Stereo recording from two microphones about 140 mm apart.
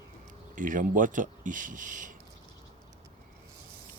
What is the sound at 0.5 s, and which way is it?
Speech, 70° right (ahead or behind).